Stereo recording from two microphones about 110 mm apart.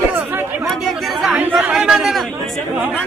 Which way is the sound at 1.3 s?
10° right (ahead or behind).